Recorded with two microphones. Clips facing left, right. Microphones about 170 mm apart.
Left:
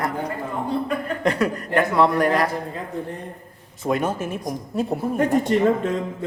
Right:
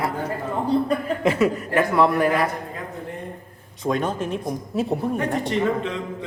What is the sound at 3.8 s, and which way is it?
A man's voice, 5° left (ahead or behind).